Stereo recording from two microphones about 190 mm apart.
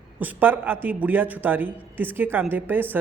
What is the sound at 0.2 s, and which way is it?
A man's voice, 10° right (ahead or behind).